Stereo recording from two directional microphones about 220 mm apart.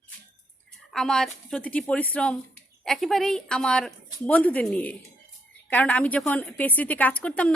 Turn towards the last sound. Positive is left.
turn(degrees=5)  # may be behind; listen again after turning